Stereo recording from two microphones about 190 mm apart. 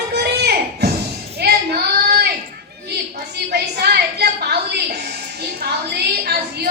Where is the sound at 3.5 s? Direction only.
55° right (ahead or behind).